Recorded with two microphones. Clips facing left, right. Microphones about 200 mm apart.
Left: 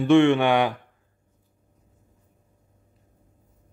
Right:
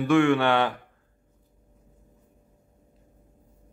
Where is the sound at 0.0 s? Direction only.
25° left (ahead or behind).